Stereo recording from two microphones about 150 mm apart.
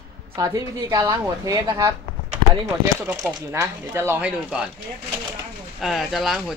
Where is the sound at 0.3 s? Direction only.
25° right (ahead or behind).